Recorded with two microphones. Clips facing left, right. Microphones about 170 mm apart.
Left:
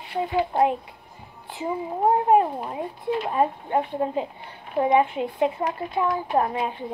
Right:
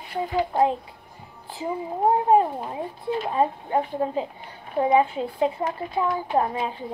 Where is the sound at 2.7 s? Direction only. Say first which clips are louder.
Left 1 dB; 30° right (ahead or behind).